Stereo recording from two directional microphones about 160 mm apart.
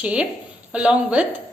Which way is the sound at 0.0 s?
10° right (ahead or behind).